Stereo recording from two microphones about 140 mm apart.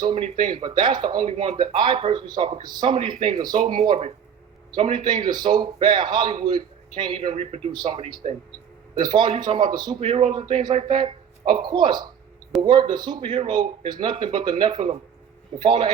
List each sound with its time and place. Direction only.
0.2 s a man's voice: 35° right (ahead or behind)
7.7 s a man's voice: 30° right (ahead or behind)